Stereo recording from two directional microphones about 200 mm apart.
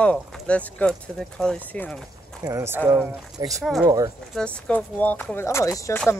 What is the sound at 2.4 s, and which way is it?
Speech, 15° right (ahead or behind).